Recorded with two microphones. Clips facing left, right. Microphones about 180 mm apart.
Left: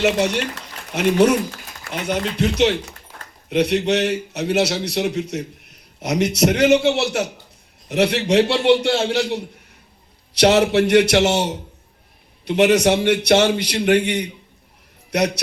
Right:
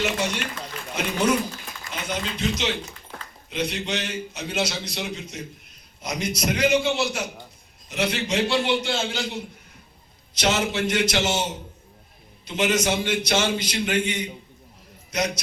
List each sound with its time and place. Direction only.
0.0 s a man's voice: 70° left (ahead or behind)